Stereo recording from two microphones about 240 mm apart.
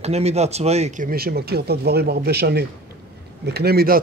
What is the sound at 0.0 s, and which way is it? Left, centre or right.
Speech, right.